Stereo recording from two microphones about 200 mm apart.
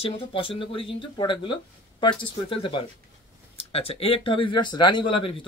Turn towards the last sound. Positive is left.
turn(degrees=25)  # may be behind; listen again after turning